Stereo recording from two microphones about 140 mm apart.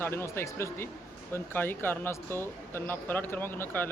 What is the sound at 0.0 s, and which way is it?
Speech, 15° left (ahead or behind).